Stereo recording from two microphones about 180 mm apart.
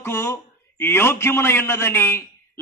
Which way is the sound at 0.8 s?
15° left (ahead or behind).